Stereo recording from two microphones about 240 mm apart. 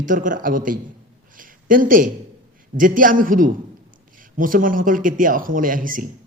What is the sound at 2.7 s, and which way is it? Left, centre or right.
A man's voice, right.